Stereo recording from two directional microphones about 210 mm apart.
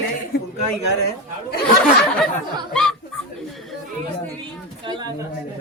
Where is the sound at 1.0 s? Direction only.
50° left (ahead or behind).